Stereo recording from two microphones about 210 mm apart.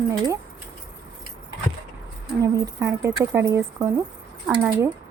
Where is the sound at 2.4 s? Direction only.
15° right (ahead or behind).